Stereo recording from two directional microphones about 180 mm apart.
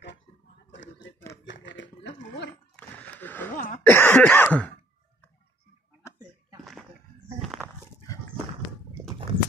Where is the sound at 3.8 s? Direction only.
10° left (ahead or behind).